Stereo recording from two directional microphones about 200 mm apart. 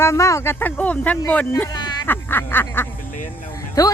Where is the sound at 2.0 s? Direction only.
10° left (ahead or behind).